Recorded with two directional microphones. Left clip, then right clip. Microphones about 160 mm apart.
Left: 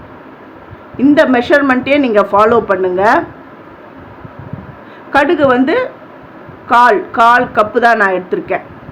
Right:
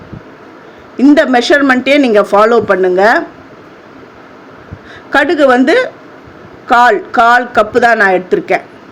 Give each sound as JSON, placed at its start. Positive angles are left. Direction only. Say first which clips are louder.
{"t": 0.9, "sound": "speech", "louder": "right 2 dB", "side_deg": -30}
{"t": 5.1, "sound": "a woman's voice", "louder": "right 2 dB", "side_deg": -35}